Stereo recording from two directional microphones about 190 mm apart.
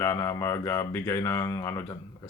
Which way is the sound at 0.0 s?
15° left (ahead or behind).